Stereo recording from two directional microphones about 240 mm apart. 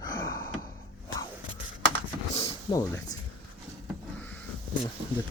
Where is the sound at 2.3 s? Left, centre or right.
Centre.